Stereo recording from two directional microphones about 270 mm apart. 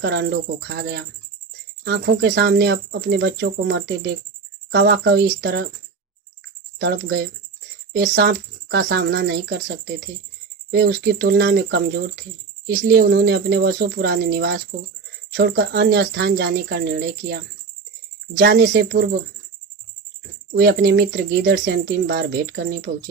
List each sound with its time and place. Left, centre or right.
0.0 s speech: right
6.7 s speech: right
20.6 s speech: right